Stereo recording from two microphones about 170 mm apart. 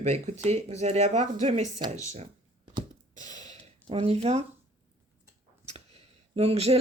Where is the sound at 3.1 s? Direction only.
45° right (ahead or behind).